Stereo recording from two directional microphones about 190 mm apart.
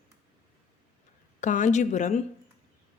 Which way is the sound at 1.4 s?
40° left (ahead or behind).